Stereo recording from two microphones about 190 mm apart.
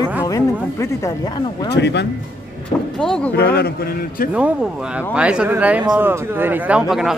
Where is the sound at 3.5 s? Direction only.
55° left (ahead or behind).